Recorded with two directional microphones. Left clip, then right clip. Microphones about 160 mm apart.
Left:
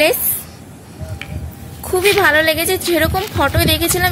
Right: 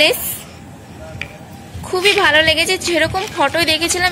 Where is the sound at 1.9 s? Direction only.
50° left (ahead or behind).